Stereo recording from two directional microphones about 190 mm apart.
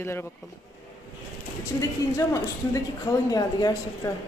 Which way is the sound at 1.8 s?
15° left (ahead or behind).